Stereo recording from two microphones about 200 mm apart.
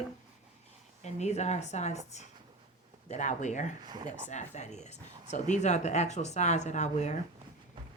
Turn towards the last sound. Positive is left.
turn(degrees=35)  # may be behind; listen again after turning